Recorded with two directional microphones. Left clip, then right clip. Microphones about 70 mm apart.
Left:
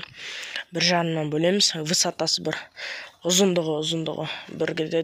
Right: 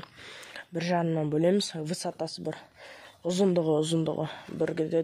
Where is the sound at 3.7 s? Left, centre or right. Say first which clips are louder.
Left 1 dB; right.